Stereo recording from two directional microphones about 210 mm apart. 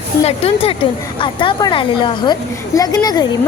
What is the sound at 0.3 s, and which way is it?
A woman's voice, 25° left (ahead or behind).